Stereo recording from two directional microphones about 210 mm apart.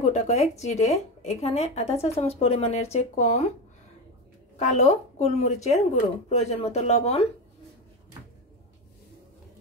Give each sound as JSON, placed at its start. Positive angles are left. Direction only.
{"t": 0.0, "sound": "speech", "side_deg": 30}
{"t": 4.6, "sound": "speech", "side_deg": 35}